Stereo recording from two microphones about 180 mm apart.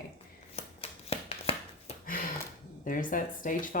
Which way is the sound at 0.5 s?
35° left (ahead or behind).